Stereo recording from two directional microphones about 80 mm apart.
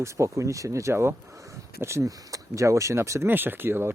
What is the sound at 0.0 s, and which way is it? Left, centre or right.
Speech, right.